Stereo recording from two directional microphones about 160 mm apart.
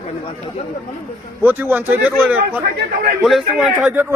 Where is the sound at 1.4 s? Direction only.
15° right (ahead or behind).